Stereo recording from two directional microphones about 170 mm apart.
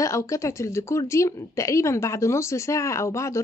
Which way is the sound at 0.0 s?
15° left (ahead or behind).